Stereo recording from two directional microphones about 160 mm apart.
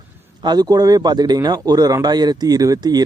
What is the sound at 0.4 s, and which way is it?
Speech, 25° right (ahead or behind).